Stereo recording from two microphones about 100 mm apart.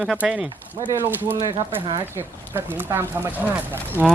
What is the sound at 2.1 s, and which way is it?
Speech, 20° right (ahead or behind).